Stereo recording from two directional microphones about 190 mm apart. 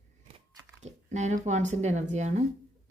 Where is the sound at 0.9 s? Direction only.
40° right (ahead or behind).